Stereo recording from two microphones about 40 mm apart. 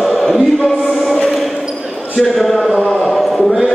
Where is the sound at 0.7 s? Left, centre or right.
Centre.